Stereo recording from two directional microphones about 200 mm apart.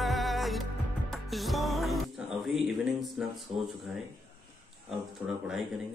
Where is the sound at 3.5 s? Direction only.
30° right (ahead or behind).